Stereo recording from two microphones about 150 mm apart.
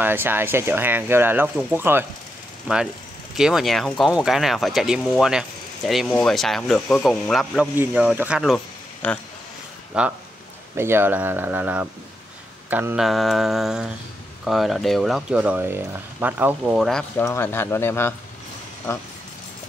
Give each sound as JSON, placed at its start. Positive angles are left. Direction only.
{"t": 0.0, "sound": "speech", "side_deg": -15}
{"t": 3.3, "sound": "speech", "side_deg": -5}
{"t": 7.7, "sound": "speech", "side_deg": -10}
{"t": 9.0, "sound": "speech", "side_deg": 10}
{"t": 9.9, "sound": "speech", "side_deg": -5}
{"t": 10.8, "sound": "speech", "side_deg": -15}
{"t": 17.2, "sound": "speech", "side_deg": 15}